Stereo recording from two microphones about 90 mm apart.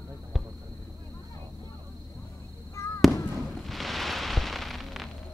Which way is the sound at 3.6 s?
Centre (ahead or behind).